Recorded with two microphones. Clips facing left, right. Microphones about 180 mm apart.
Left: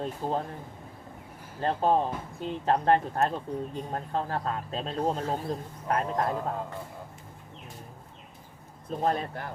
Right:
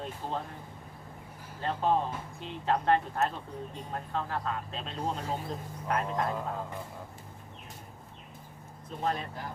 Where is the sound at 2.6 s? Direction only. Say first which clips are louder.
Left 3 dB; 40° left (ahead or behind).